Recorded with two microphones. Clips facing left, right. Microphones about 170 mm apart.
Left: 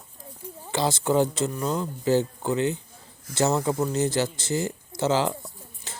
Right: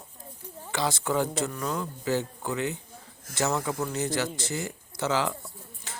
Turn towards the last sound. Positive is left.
turn(degrees=25)  # may be behind; listen again after turning